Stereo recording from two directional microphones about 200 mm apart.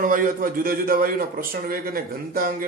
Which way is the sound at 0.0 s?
45° right (ahead or behind).